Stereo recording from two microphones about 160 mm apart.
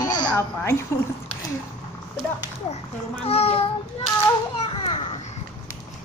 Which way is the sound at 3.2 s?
40° left (ahead or behind).